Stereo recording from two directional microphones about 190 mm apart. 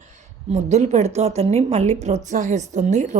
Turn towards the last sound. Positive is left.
turn(degrees=-40)  # may be behind; listen again after turning